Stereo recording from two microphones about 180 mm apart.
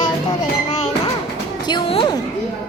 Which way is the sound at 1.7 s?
25° left (ahead or behind).